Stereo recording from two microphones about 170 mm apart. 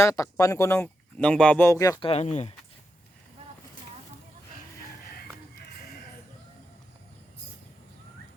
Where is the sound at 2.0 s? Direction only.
35° left (ahead or behind).